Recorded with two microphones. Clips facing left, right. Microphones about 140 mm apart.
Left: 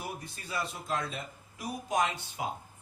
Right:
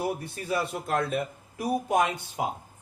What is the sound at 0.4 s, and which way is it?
Speech, 60° right (ahead or behind).